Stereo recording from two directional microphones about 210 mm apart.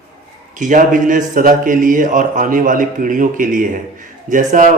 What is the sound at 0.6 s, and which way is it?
A man's voice, 40° right (ahead or behind).